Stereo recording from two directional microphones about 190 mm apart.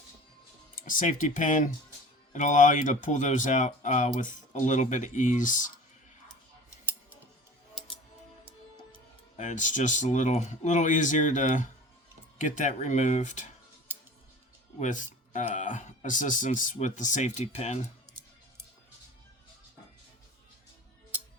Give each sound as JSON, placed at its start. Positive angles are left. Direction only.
{"t": 0.8, "sound": "speech", "side_deg": 45}
{"t": 9.4, "sound": "speech", "side_deg": 40}
{"t": 14.8, "sound": "speech", "side_deg": 40}